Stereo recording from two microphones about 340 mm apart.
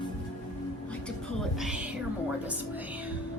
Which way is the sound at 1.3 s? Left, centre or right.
Centre.